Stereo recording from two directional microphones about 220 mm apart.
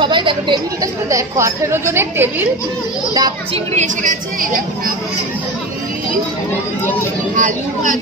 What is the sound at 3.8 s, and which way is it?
A woman's voice, 35° right (ahead or behind).